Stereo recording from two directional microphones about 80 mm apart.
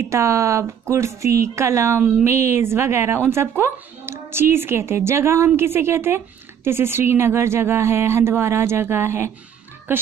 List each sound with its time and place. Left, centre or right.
0.0 s a woman's voice: right